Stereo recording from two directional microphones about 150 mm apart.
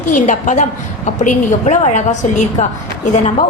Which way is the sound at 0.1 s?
60° left (ahead or behind).